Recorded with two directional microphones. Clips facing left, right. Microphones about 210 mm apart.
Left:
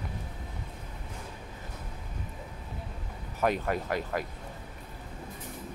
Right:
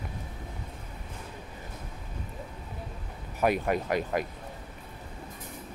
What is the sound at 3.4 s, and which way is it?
Speech, 15° right (ahead or behind).